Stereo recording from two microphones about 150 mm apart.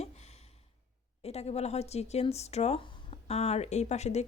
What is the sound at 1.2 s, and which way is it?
Speech, 45° left (ahead or behind).